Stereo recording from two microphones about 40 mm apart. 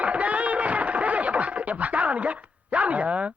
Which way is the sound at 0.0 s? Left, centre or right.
Right.